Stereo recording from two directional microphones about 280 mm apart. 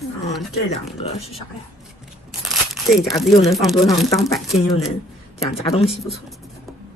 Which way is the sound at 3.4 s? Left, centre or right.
Centre.